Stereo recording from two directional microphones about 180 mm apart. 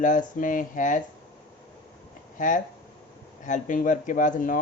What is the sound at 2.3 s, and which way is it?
A woman's voice, 50° left (ahead or behind).